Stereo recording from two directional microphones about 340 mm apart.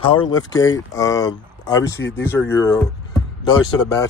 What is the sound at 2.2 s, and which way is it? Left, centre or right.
Speech, centre.